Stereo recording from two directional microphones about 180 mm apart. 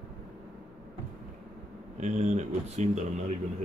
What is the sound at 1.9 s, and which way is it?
Speech, 40° right (ahead or behind).